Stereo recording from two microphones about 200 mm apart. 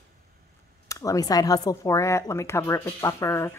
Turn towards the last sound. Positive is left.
turn(degrees=15)  # may be behind; listen again after turning